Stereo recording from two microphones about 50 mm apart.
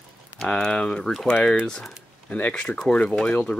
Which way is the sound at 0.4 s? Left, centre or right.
Centre.